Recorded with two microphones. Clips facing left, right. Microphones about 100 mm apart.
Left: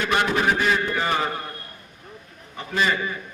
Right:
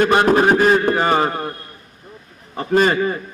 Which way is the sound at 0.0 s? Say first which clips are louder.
Right 8 dB; 45° right (ahead or behind).